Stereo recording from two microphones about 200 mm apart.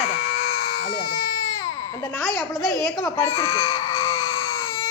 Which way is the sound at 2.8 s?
Centre (ahead or behind).